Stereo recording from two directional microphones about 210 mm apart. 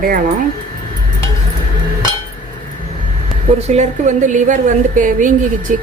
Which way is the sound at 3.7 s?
35° right (ahead or behind).